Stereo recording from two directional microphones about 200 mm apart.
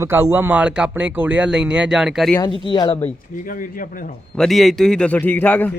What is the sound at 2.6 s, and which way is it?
Speech, 25° left (ahead or behind).